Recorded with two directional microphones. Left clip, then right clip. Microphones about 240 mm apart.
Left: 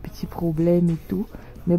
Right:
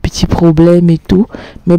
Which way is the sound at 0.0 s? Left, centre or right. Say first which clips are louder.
Right 18 dB; right.